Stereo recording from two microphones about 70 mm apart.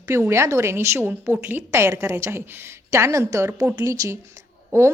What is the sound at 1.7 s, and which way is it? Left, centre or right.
A woman's voice, right.